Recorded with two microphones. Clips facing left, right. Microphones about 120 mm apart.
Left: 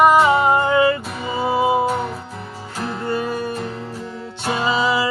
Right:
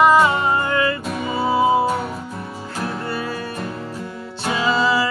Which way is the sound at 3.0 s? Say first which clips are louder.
Left 4 dB; 20° left (ahead or behind).